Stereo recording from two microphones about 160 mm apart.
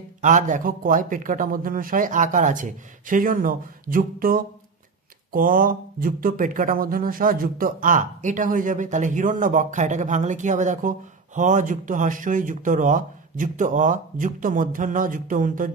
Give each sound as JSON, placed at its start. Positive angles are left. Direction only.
{"t": 0.2, "sound": "speech", "side_deg": -50}